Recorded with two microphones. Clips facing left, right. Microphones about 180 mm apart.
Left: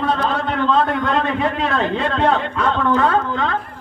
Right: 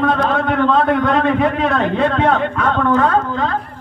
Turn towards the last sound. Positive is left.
turn(degrees=-40)  # may be behind; listen again after turning